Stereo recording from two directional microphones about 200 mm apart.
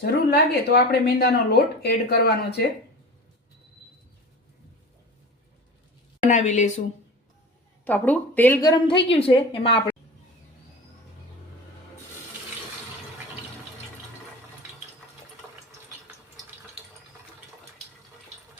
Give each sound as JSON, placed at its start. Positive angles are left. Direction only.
{"t": 0.0, "sound": "speech", "side_deg": 55}
{"t": 6.3, "sound": "a woman's voice", "side_deg": 35}
{"t": 7.9, "sound": "speech", "side_deg": 10}
{"t": 9.0, "sound": "a woman's voice", "side_deg": 30}